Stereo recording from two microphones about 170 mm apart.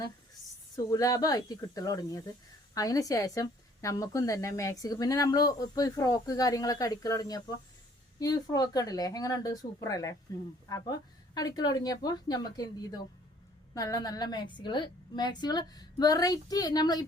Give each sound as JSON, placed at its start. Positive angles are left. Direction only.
{"t": 0.9, "sound": "a woman's voice", "side_deg": 20}